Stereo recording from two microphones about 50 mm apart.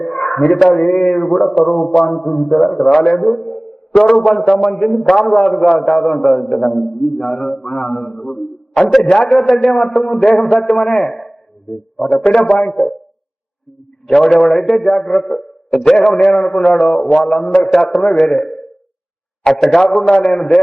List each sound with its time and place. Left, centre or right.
0.0 s a sound: centre
0.6 s a man's voice: centre
12.0 s a man's voice: centre
12.7 s speech: centre
14.1 s a man's voice: centre